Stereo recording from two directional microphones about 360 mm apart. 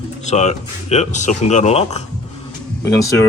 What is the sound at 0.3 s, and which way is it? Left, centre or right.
Speech, centre.